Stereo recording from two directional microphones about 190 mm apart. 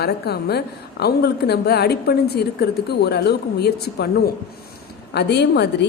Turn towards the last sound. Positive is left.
turn(degrees=65)  # may be behind; listen again after turning